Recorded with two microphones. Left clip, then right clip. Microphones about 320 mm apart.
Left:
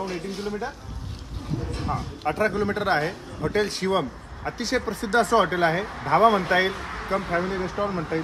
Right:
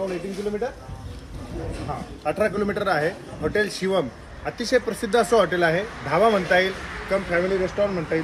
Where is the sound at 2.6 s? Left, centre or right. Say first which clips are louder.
Right 1 dB; centre.